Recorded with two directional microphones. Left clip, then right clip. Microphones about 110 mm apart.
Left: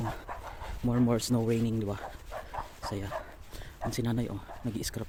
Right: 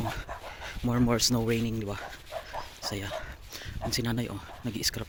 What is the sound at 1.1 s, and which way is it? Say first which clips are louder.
Speech: right 4 dB; 15° left (ahead or behind).